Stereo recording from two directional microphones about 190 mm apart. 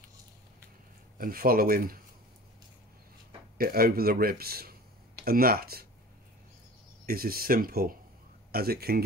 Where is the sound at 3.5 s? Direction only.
50° right (ahead or behind).